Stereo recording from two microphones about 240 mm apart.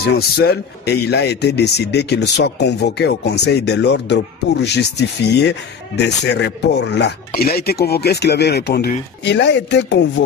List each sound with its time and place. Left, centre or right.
0.4 s speech: left